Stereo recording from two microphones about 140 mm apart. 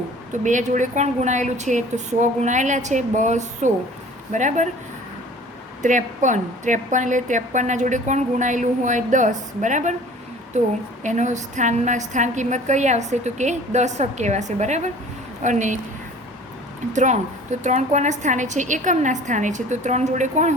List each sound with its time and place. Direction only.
0.4 s a woman's voice: 65° right (ahead or behind)
5.8 s a woman's voice: 65° right (ahead or behind)
11.0 s a woman's voice: 60° right (ahead or behind)
16.9 s a woman's voice: 60° right (ahead or behind)